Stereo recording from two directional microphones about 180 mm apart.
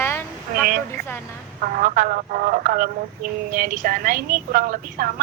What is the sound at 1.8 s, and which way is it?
A woman's voice, 50° right (ahead or behind).